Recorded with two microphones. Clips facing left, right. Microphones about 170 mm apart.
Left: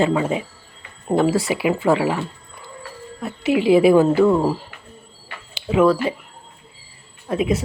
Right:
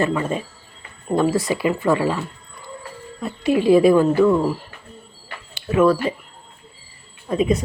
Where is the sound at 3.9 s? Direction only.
25° left (ahead or behind).